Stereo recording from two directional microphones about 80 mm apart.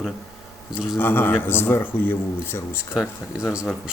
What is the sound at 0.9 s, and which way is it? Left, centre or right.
Speech, left.